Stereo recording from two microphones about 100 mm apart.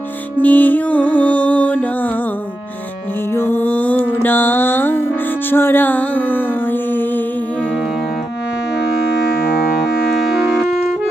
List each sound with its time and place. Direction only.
0.3 s music: 15° left (ahead or behind)
3.3 s mantra: 20° left (ahead or behind)